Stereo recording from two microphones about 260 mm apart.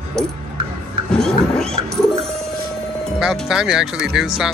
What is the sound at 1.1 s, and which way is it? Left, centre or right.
Speech, centre.